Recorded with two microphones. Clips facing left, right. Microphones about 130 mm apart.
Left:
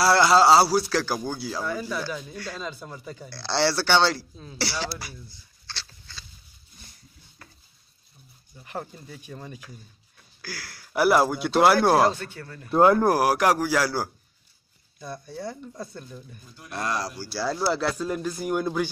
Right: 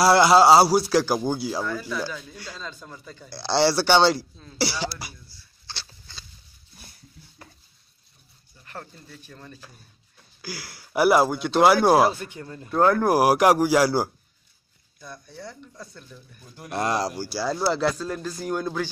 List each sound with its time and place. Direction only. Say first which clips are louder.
0.0 s speech: right 2 dB; 15° right (ahead or behind)
1.6 s speech: right 1 dB; 10° left (ahead or behind)
3.3 s speech: right 3 dB; 15° right (ahead or behind)
5.7 s a sound: even; 15° right (ahead or behind)
8.6 s speech: left 5 dB; 15° left (ahead or behind)
10.4 s speech: right 2 dB; 10° right (ahead or behind)
12.6 s speech: left 2 dB; 25° left (ahead or behind)
13.1 s speech: right 3 dB; 15° right (ahead or behind)
15.0 s speech: left 5 dB; 25° left (ahead or behind)
16.7 s speech: right 4 dB; 25° right (ahead or behind)
17.3 s speech: left 1 dB; 5° right (ahead or behind)